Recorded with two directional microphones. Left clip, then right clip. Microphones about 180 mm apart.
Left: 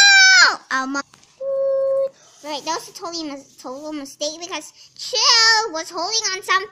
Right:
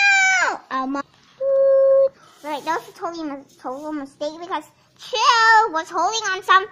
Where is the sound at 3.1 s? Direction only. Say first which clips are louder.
Even; 10° left (ahead or behind).